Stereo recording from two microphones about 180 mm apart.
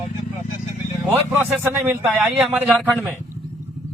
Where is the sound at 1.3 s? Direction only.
10° right (ahead or behind).